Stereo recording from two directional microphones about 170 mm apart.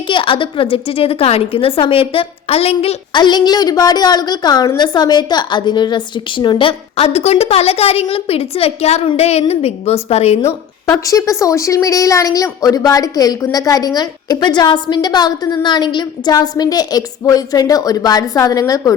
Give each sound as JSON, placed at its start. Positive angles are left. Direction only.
{"t": 0.1, "sound": "a woman's voice", "side_deg": 30}
{"t": 11.0, "sound": "a woman's voice", "side_deg": 20}